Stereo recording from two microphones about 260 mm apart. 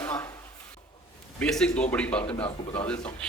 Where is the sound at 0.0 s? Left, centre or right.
Centre.